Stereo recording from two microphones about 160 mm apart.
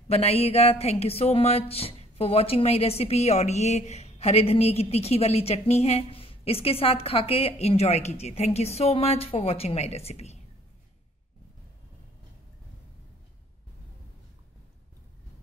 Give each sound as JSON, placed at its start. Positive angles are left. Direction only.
{"t": 0.1, "sound": "a woman's voice", "side_deg": 40}